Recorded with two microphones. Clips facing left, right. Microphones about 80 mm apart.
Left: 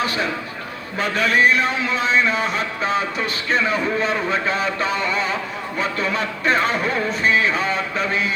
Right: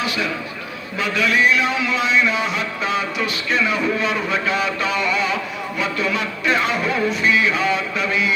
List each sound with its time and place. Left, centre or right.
0.9 s a man's voice: left